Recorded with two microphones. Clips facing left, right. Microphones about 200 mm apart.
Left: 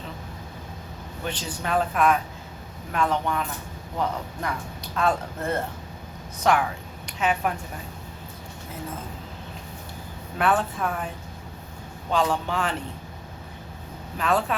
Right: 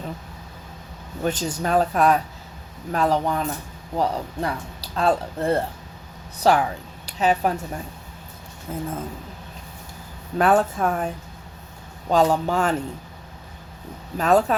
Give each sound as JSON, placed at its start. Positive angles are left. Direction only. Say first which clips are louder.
{"t": 1.2, "sound": "a woman's voice", "louder": "right 7 dB", "side_deg": -45}
{"t": 10.3, "sound": "speech", "louder": "right 5 dB", "side_deg": -40}
{"t": 12.1, "sound": "speech", "louder": "right 5 dB", "side_deg": -40}
{"t": 14.2, "sound": "speech", "louder": "right 6 dB", "side_deg": -40}